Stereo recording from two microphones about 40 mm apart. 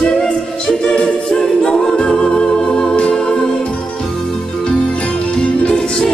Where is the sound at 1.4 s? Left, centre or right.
Centre.